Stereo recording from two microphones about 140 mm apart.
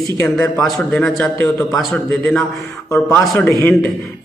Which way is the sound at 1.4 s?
20° left (ahead or behind).